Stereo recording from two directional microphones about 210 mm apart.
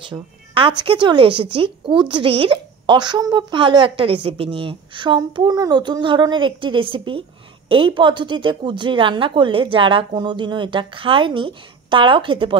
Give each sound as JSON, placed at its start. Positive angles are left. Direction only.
{"t": 0.0, "sound": "speech", "side_deg": -25}